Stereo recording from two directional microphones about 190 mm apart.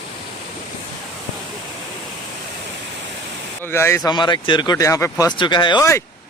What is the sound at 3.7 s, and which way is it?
A man's voice, 15° left (ahead or behind).